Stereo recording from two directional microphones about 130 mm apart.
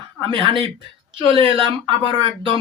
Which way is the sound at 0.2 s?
40° right (ahead or behind).